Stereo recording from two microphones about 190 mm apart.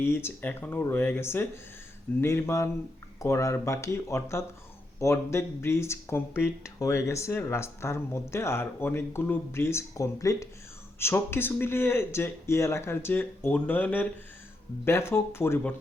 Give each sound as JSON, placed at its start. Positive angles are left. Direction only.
{"t": 0.0, "sound": "speech", "side_deg": 10}